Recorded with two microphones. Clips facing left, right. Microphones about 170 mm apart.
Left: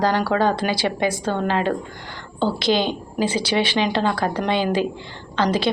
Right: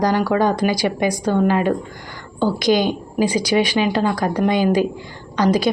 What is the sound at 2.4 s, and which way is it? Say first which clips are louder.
A woman's voice: right 3 dB; 15° right (ahead or behind).